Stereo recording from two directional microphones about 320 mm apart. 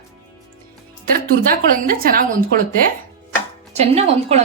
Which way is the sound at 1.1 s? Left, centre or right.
Right.